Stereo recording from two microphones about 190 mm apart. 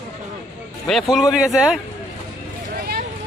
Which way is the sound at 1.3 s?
5° right (ahead or behind).